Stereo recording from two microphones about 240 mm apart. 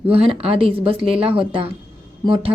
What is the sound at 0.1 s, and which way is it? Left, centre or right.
A woman's voice, right.